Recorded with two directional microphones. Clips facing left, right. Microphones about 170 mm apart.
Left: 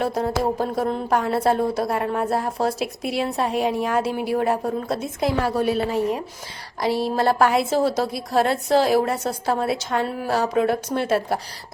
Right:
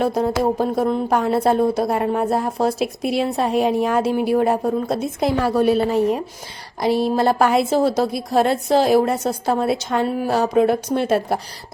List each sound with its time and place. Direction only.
0.0 s a woman's voice: 20° right (ahead or behind)
6.8 s speech: 20° right (ahead or behind)